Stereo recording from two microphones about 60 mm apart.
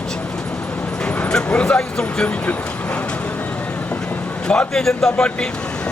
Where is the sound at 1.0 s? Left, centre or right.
Centre.